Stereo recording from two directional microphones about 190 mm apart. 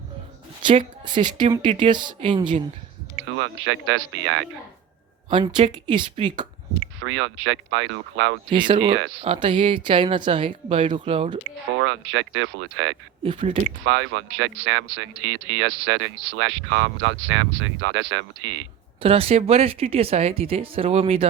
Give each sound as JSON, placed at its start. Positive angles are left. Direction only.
{"t": 0.6, "sound": "a woman's voice", "side_deg": -25}
{"t": 3.3, "sound": "speech", "side_deg": -90}
{"t": 5.3, "sound": "speech", "side_deg": -25}
{"t": 7.0, "sound": "speech", "side_deg": -85}
{"t": 8.4, "sound": "speech", "side_deg": -25}
{"t": 11.8, "sound": "speech", "side_deg": -90}
{"t": 13.2, "sound": "speech", "side_deg": -30}
{"t": 13.8, "sound": "speech", "side_deg": -90}
{"t": 19.0, "sound": "speech", "side_deg": -30}